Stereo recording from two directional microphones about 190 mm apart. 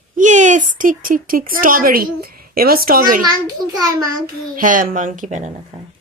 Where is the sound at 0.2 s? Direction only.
40° right (ahead or behind).